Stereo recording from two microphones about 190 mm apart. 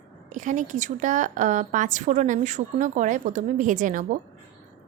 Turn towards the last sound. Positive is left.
turn(degrees=-45)  # may be behind; listen again after turning